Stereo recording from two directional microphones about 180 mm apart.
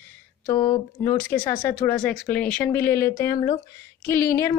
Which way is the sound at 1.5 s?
10° left (ahead or behind).